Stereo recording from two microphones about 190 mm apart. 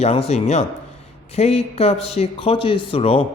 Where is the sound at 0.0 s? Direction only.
35° left (ahead or behind).